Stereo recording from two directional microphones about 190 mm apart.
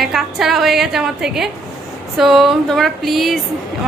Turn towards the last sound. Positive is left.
turn(degrees=0)  # may be behind; listen again after turning